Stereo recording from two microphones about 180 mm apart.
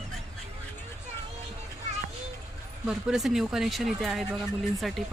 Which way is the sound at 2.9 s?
Centre (ahead or behind).